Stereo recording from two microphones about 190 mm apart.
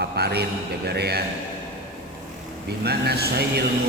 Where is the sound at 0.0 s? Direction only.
60° right (ahead or behind).